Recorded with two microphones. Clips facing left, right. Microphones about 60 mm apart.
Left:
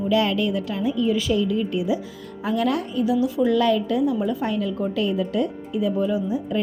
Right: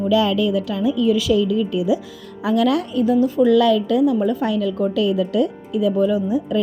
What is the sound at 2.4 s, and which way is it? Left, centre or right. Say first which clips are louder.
Speech: right 5 dB; right.